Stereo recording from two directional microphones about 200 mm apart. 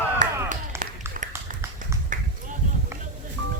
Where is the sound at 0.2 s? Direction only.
40° right (ahead or behind).